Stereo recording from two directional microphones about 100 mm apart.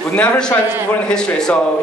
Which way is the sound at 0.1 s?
15° left (ahead or behind).